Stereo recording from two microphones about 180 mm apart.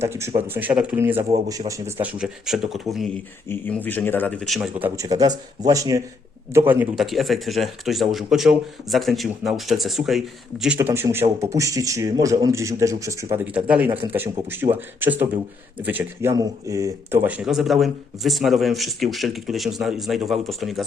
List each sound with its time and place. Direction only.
0.0 s a man's voice: 15° right (ahead or behind)
1.5 s a man's voice: 20° right (ahead or behind)
2.1 s speech: 5° right (ahead or behind)
3.5 s speech: 10° left (ahead or behind)
4.8 s speech: 20° right (ahead or behind); by 10.8 s centre (ahead or behind)
10.8 s a man's voice: 15° right (ahead or behind)